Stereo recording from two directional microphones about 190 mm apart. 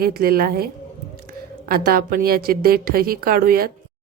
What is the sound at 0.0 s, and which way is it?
A woman's voice, 50° right (ahead or behind).